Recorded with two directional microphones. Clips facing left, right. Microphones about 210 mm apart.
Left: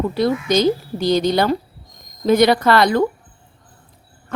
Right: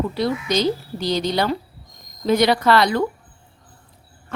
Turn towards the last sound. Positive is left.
turn(degrees=50)  # may be behind; listen again after turning